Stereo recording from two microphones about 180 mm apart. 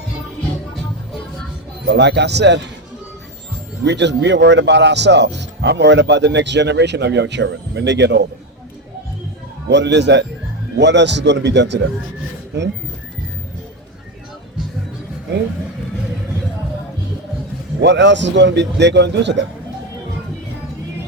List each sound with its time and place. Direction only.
1.9 s a man's voice: 70° right (ahead or behind)
3.8 s a man's voice: 75° right (ahead or behind)
9.6 s a man's voice: 75° right (ahead or behind)
17.7 s a man's voice: 80° right